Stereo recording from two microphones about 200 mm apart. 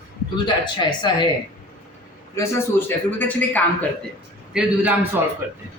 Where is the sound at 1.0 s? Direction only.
20° left (ahead or behind).